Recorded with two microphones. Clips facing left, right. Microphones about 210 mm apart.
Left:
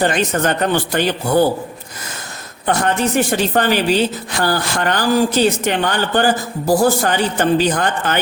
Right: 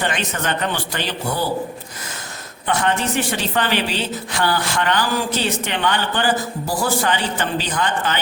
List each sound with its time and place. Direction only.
0.0 s a woman's voice: 40° left (ahead or behind)
2.6 s a woman's voice: 45° left (ahead or behind)